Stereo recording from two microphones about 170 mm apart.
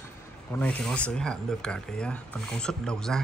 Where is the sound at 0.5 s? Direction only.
5° left (ahead or behind).